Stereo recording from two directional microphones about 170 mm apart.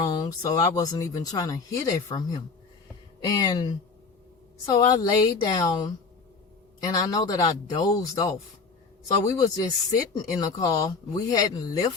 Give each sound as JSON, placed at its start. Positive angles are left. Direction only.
{"t": 0.1, "sound": "speech", "side_deg": 25}